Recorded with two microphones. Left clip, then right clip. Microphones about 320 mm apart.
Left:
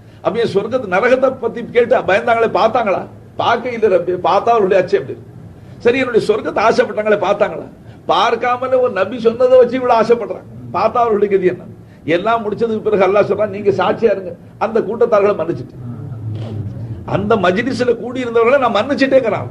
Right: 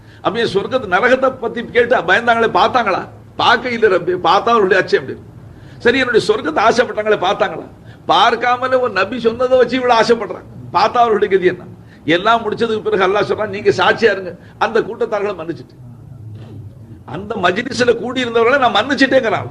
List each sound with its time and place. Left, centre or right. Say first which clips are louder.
0.2 s a man's voice: left 1 dB; centre
17.1 s a man's voice: left 3 dB; centre